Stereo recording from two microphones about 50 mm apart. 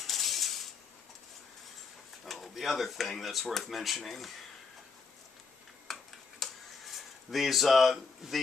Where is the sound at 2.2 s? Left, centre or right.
Centre.